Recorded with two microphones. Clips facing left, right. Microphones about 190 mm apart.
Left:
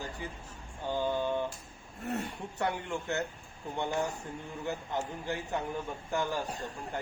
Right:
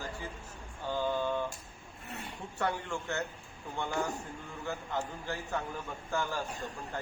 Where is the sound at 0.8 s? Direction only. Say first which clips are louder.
Left 1 dB; 15° left (ahead or behind).